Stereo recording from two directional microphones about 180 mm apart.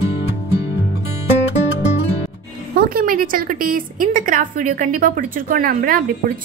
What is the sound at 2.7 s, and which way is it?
A woman's voice, 55° right (ahead or behind).